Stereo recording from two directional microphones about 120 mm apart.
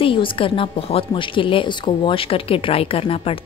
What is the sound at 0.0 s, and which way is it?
A woman's voice, 45° left (ahead or behind).